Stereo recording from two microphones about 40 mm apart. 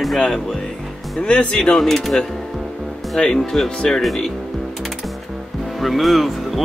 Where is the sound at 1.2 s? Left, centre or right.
Left.